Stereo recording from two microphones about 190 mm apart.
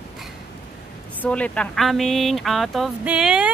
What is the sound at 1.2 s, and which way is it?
Speech, 5° left (ahead or behind).